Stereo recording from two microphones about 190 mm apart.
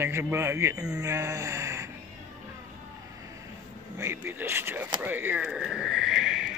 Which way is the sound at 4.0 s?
10° right (ahead or behind).